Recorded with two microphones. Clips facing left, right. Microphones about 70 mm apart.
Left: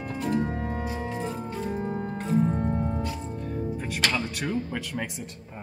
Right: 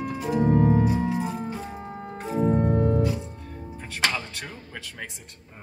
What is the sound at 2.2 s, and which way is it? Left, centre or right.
Music, centre.